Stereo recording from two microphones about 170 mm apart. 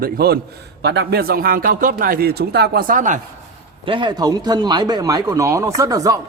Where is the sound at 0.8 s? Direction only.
80° right; by 3.1 s 50° right (ahead or behind).